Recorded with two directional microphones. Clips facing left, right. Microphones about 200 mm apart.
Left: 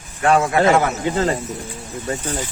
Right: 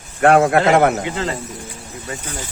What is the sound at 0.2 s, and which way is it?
Speech, 60° right (ahead or behind).